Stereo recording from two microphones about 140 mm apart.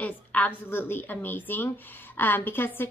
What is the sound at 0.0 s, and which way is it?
A woman's voice, 10° left (ahead or behind).